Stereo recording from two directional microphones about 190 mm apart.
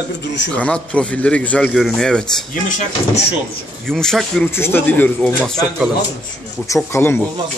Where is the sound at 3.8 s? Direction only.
5° left (ahead or behind).